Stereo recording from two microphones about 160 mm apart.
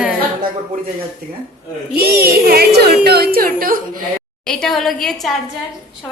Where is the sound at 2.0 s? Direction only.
75° right (ahead or behind).